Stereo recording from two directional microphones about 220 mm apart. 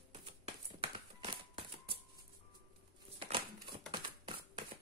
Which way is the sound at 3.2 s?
25° right (ahead or behind).